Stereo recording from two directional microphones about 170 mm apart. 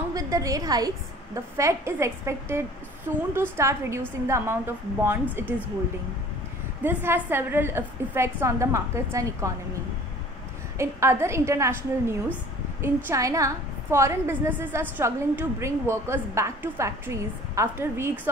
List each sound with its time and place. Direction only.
0.1 s a woman's voice: 20° right (ahead or behind)
6.8 s a woman's voice: 10° right (ahead or behind)
10.8 s a woman's voice: 15° right (ahead or behind)